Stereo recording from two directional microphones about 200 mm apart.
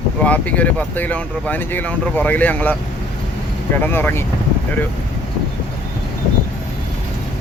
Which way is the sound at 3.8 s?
10° left (ahead or behind).